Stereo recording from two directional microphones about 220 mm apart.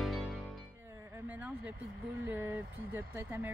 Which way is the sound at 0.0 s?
Centre (ahead or behind).